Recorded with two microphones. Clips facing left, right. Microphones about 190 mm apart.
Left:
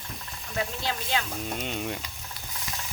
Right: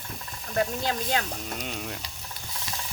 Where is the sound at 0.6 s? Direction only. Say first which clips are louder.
Right 4 dB; 45° right (ahead or behind).